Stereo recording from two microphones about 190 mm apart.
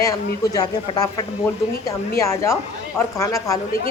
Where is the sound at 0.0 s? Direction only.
20° left (ahead or behind).